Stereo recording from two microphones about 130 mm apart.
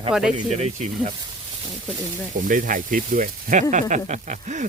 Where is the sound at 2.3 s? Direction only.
90° right.